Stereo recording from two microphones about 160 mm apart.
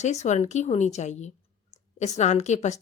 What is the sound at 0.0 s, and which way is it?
A woman's voice, 45° left (ahead or behind).